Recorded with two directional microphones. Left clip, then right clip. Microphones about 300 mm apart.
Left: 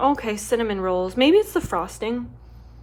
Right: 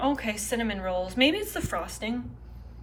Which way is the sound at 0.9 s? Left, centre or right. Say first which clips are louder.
Left 6 dB; centre.